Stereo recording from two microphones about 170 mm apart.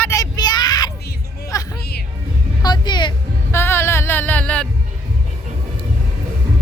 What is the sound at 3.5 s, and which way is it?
Music, 15° left (ahead or behind).